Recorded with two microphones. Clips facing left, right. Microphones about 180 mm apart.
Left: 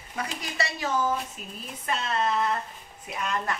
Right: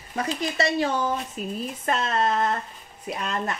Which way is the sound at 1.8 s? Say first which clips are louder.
Right 3 dB; 50° right (ahead or behind).